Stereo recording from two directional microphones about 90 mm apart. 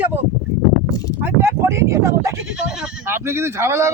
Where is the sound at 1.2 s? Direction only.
25° right (ahead or behind).